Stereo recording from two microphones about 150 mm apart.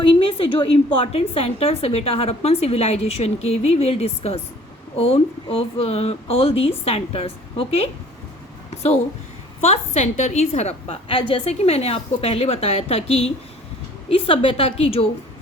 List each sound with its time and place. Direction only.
0.0 s a woman's voice: 40° left (ahead or behind)
9.6 s a woman's voice: 45° left (ahead or behind)